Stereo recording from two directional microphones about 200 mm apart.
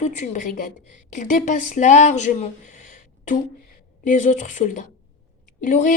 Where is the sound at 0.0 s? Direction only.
35° left (ahead or behind).